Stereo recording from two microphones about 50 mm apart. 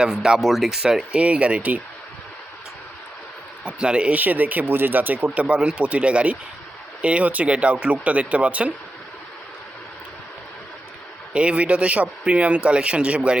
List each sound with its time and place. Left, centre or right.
0.0 s speech: centre
1.1 s a man's voice: right
3.6 s a man's voice: right
4.1 s speech: right
5.2 s a man's voice: right
11.3 s a man's voice: right